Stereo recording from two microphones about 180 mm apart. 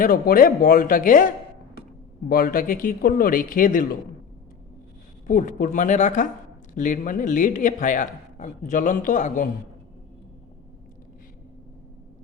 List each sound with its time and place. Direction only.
0.0 s a man's voice: 50° left (ahead or behind)
2.3 s a man's voice: 55° left (ahead or behind)
5.2 s a man's voice: 45° left (ahead or behind)